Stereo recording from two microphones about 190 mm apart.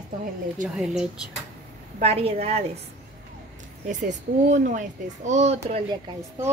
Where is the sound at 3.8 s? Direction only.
40° right (ahead or behind).